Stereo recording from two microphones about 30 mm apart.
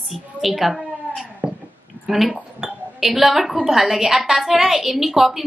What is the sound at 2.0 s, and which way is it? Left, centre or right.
A woman's voice, centre.